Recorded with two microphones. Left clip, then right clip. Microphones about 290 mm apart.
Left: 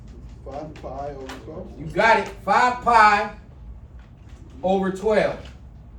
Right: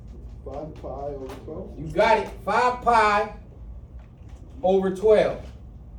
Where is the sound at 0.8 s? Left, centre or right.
Left.